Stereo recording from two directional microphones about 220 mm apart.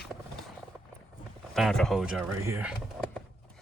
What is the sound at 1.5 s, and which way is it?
Speech, centre (ahead or behind).